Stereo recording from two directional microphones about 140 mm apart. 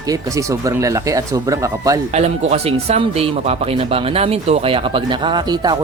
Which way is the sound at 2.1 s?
50° right (ahead or behind).